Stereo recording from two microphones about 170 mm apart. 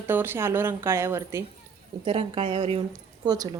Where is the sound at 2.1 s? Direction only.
30° right (ahead or behind).